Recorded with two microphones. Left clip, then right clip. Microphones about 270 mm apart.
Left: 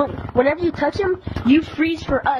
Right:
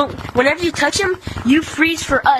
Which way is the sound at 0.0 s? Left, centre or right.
Right.